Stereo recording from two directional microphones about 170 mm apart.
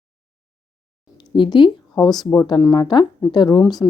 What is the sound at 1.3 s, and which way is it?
A woman's voice, 30° left (ahead or behind).